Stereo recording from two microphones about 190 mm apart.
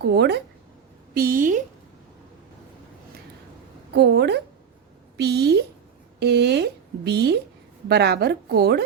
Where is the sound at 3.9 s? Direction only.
65° right (ahead or behind).